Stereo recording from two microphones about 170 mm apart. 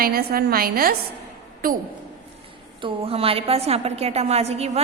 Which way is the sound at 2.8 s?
30° right (ahead or behind).